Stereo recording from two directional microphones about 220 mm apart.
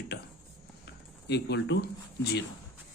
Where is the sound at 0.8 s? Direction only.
50° left (ahead or behind).